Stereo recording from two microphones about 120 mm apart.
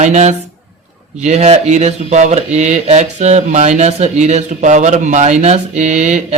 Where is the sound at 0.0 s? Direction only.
75° right (ahead or behind).